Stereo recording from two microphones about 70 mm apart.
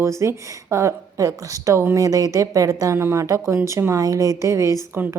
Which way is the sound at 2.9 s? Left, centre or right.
Right.